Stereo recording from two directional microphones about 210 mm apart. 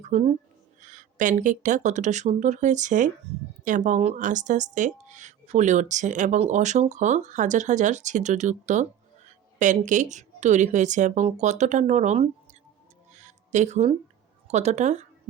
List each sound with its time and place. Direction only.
0.0 s a woman's voice: 30° right (ahead or behind)
13.1 s a sound: 35° right (ahead or behind)
14.4 s a woman's voice: 30° right (ahead or behind)